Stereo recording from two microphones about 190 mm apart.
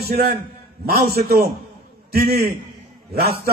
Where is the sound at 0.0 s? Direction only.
55° right (ahead or behind).